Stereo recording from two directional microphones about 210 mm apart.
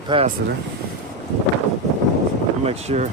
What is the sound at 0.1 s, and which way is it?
Speech, 25° right (ahead or behind).